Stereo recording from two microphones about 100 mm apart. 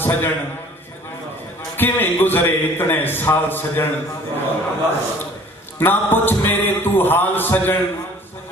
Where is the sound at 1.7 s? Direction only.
20° left (ahead or behind).